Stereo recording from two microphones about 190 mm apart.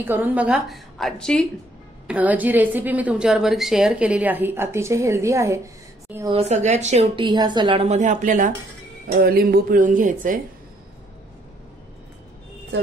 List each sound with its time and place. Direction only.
0.0 s a woman's voice: 10° right (ahead or behind)
6.3 s speech: 35° right (ahead or behind)
9.0 s speech: 50° right (ahead or behind)